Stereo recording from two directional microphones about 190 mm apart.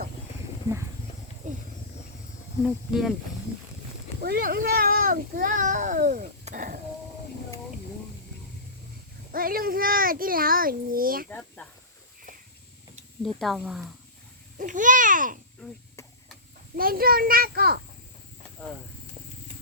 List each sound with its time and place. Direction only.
1.4 s a sound: 40° right (ahead or behind)
2.9 s speech: centre (ahead or behind)
4.2 s speech: 50° right (ahead or behind)
9.3 s speech: 50° right (ahead or behind)
11.3 s speech: 5° left (ahead or behind)
13.2 s speech: centre (ahead or behind)
14.6 s speech: 45° right (ahead or behind)
16.7 s speech: 50° right (ahead or behind)